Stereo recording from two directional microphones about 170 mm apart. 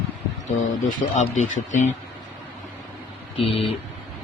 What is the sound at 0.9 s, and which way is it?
Speech, 45° left (ahead or behind).